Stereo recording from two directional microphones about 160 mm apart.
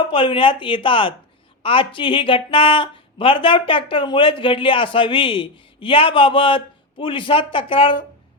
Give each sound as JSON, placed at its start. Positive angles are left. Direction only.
{"t": 0.1, "sound": "speech", "side_deg": 30}